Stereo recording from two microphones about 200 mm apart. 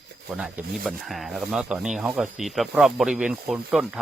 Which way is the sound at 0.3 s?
5° right (ahead or behind).